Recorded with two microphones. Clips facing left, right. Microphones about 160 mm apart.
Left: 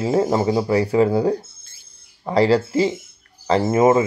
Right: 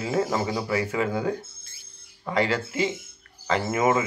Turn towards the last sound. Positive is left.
turn(degrees=35)  # may be behind; listen again after turning